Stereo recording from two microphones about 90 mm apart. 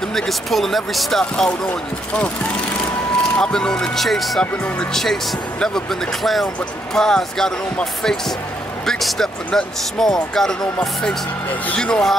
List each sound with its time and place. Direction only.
0.1 s speech: centre (ahead or behind)
1.7 s speech: 15° left (ahead or behind)
3.3 s speech: 10° left (ahead or behind)